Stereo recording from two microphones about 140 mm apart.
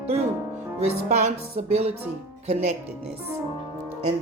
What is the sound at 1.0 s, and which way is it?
Speech, 50° right (ahead or behind).